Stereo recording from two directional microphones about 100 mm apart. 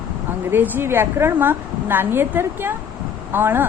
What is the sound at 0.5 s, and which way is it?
A woman's voice, 20° right (ahead or behind).